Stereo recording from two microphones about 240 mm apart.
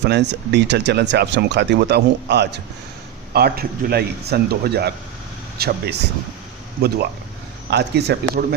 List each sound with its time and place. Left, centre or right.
0.0 s speech: right